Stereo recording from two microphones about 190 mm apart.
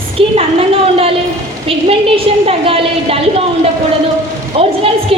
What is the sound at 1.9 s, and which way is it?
A woman's voice, 30° right (ahead or behind).